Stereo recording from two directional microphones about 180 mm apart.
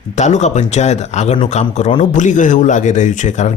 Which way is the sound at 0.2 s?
40° left (ahead or behind).